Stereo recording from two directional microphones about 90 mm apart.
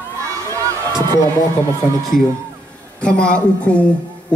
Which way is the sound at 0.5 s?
35° right (ahead or behind).